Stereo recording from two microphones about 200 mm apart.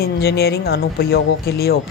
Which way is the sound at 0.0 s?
50° left (ahead or behind).